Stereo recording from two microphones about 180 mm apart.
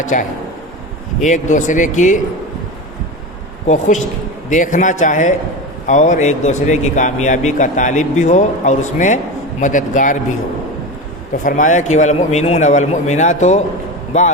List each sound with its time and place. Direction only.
0.0 s speech: 45° left (ahead or behind)
3.7 s speech: 45° left (ahead or behind)
11.4 s speech: 45° left (ahead or behind)